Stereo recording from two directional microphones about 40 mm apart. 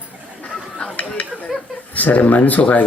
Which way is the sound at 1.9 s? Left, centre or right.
Left.